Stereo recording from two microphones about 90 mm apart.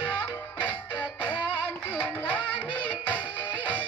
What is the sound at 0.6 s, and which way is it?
Music, 20° left (ahead or behind).